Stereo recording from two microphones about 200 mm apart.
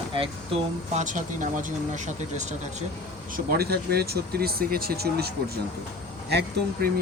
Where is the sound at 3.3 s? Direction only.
50° right (ahead or behind).